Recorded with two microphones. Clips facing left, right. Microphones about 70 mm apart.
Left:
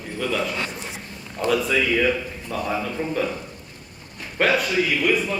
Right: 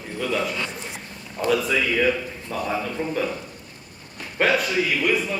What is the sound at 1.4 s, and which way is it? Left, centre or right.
A man's voice, centre.